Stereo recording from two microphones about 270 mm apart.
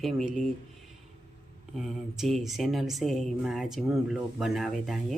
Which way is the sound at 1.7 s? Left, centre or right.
Centre.